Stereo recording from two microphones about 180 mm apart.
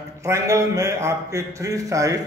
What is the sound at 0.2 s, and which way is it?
A man's voice, 15° right (ahead or behind).